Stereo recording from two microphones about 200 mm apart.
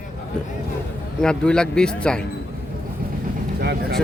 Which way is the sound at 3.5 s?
55° right (ahead or behind).